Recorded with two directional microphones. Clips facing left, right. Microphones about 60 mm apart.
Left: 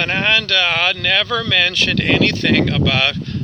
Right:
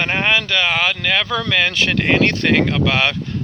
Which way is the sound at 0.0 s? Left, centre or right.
Centre.